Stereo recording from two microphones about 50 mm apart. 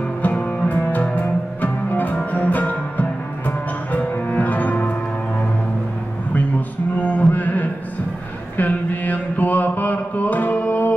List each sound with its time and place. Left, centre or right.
0.2 s music: left
7.0 s mantra: left